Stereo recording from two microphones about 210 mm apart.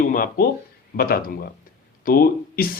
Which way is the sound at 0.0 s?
40° left (ahead or behind).